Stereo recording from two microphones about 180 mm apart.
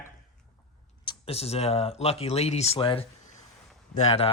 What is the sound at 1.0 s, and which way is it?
Speech, 35° left (ahead or behind).